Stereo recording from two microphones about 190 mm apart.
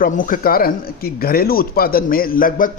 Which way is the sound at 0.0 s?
45° left (ahead or behind).